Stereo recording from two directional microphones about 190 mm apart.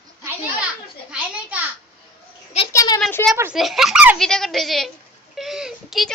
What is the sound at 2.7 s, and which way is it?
Speech, 15° left (ahead or behind).